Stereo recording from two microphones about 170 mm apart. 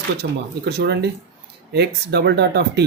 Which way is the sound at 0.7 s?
75° right (ahead or behind).